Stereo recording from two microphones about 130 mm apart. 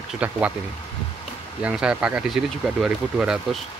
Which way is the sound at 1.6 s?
5° right (ahead or behind).